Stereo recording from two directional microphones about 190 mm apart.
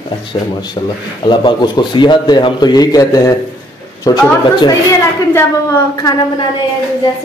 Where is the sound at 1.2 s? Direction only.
25° left (ahead or behind).